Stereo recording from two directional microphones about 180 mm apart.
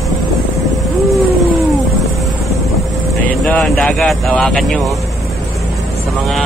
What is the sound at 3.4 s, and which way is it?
Speech, 5° left (ahead or behind).